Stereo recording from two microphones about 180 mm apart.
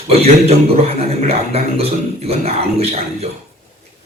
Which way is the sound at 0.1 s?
35° right (ahead or behind).